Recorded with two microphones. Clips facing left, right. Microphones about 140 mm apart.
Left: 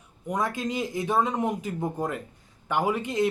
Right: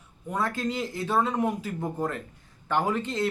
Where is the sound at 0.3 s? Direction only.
15° left (ahead or behind).